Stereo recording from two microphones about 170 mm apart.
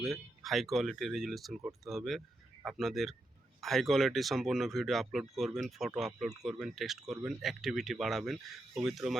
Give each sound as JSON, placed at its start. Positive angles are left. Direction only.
{"t": 0.0, "sound": "speech", "side_deg": 0}